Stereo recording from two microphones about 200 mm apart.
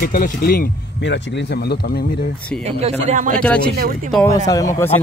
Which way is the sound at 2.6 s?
30° right (ahead or behind).